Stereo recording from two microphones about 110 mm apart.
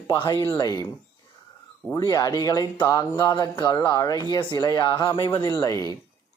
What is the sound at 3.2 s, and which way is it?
Speech, 40° left (ahead or behind).